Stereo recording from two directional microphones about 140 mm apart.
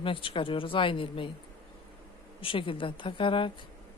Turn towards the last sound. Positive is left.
turn(degrees=35)  # may be behind; listen again after turning